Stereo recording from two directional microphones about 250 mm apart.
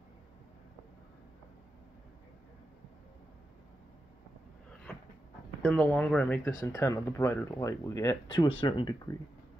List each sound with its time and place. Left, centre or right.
5.6 s speech: centre